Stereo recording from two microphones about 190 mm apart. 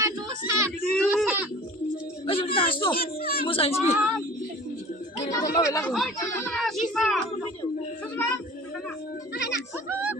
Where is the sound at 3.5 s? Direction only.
30° left (ahead or behind).